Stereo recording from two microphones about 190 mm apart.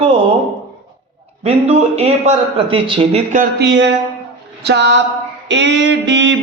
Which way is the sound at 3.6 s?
70° right (ahead or behind).